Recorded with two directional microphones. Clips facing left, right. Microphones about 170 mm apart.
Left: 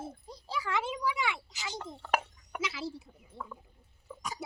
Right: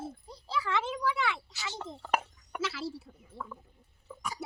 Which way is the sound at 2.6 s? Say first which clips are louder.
Right 2 dB; 15° left (ahead or behind).